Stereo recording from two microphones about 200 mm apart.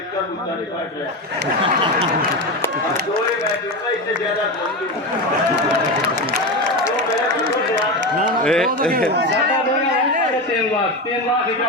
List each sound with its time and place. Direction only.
8.4 s a man's voice: centre (ahead or behind)
8.8 s speech: 45° right (ahead or behind)